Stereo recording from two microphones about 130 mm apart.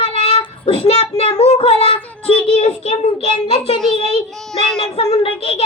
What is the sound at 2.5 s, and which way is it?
A child's voice, 55° left (ahead or behind).